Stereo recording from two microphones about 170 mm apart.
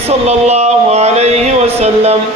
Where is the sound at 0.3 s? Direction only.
40° right (ahead or behind).